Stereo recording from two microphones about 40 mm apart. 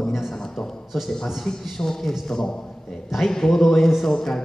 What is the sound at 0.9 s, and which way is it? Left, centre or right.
A man's voice, centre.